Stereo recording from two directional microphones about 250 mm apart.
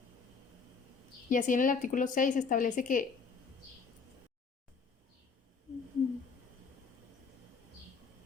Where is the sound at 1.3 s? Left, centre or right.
Left.